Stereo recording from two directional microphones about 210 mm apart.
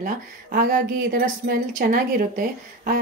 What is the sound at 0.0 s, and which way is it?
Speech, 40° right (ahead or behind).